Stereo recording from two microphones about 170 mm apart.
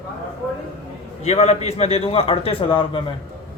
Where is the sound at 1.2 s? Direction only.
40° left (ahead or behind).